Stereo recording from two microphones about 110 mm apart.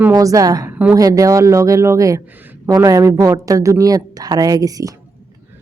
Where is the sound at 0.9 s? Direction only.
30° right (ahead or behind).